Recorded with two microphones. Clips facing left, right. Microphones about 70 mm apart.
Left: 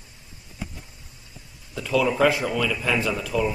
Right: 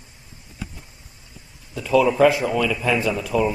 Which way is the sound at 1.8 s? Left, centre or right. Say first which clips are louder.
Right 5 dB; centre.